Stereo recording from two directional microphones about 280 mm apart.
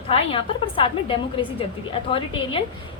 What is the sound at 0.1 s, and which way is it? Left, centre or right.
A woman's voice, centre.